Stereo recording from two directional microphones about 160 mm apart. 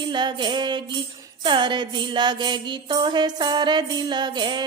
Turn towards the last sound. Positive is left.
turn(degrees=-30)  # may be behind; listen again after turning